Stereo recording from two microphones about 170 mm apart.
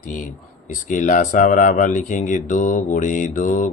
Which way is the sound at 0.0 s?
50° left (ahead or behind).